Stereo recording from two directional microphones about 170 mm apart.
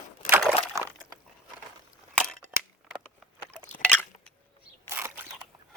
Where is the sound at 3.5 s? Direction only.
10° left (ahead or behind).